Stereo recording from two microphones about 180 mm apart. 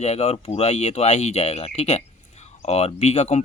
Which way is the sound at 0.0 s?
35° left (ahead or behind).